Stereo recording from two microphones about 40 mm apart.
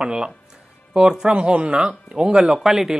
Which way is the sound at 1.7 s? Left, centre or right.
Right.